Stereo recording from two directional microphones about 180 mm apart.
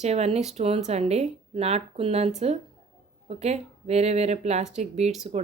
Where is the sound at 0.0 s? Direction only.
35° right (ahead or behind).